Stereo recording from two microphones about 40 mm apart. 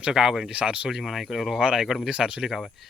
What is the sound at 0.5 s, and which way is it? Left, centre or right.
Speech, right.